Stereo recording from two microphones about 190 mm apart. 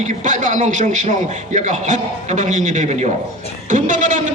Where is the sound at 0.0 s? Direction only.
40° right (ahead or behind).